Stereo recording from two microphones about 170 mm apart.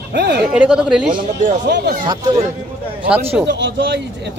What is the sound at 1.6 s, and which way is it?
Speech, 85° right.